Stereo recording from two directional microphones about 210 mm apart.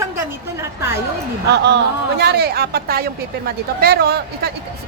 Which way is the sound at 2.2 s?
50° right (ahead or behind).